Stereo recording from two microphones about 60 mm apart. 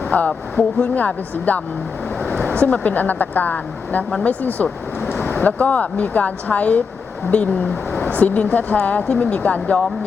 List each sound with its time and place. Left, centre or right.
0.1 s a woman's voice: left